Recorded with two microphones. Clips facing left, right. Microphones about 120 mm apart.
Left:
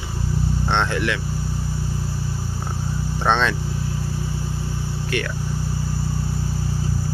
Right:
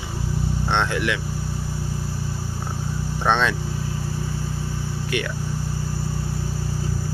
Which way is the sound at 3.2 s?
10° right (ahead or behind).